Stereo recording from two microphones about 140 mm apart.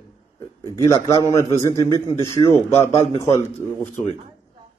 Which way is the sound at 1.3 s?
20° left (ahead or behind).